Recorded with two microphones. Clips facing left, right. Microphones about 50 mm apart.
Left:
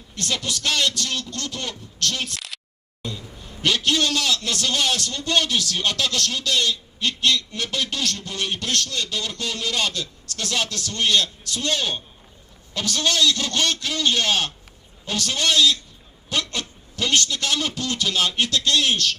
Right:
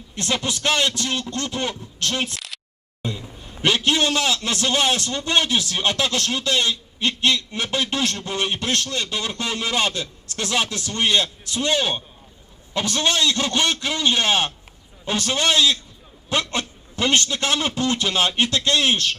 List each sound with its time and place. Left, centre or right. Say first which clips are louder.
0.2 s a man's voice: right 3 dB; right
2.3 s a sound: even; centre
3.0 s a man's voice: right 3 dB; right